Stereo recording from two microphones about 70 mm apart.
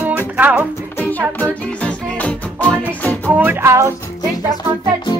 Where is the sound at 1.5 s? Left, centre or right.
Centre.